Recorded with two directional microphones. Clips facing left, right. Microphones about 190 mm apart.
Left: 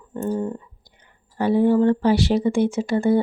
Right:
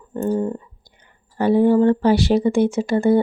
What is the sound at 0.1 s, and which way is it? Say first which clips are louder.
Speech: right 4 dB; 40° right (ahead or behind).